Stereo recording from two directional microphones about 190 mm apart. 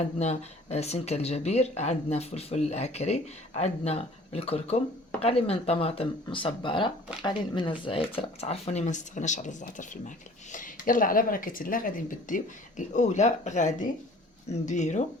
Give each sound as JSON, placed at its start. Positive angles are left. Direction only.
{"t": 0.2, "sound": "speech", "side_deg": 35}